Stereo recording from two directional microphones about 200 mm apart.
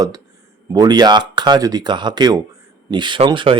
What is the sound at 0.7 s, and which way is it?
Speech, 20° right (ahead or behind).